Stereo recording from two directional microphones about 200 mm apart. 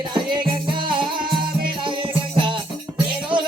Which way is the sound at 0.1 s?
25° right (ahead or behind).